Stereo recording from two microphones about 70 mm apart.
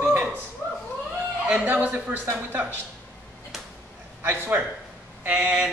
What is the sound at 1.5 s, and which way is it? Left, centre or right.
Speech, right.